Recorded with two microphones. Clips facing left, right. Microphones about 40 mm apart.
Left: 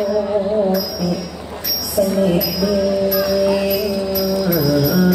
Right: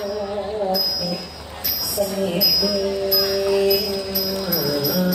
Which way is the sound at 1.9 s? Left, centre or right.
Left.